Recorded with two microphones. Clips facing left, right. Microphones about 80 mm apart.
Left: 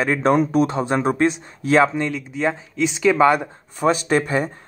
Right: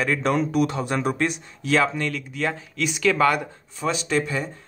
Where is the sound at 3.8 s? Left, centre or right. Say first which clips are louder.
Left 6 dB; left.